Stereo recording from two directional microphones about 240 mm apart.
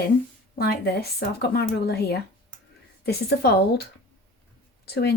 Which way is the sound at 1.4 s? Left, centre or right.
Left.